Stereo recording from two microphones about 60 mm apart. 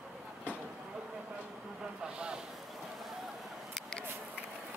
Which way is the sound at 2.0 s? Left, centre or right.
Centre.